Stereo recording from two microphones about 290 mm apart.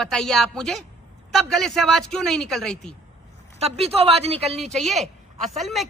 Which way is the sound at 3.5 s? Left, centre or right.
Right.